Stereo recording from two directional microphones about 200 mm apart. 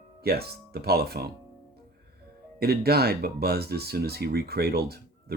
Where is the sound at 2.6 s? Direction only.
50° right (ahead or behind).